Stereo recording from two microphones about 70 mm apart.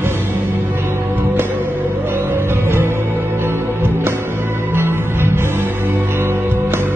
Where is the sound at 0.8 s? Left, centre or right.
Right.